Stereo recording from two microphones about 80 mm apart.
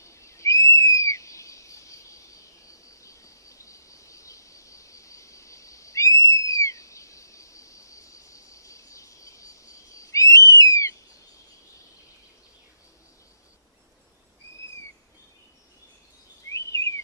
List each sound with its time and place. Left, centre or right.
0.0 s owl: left
2.7 s cricket: left
16.5 s bird vocalization: left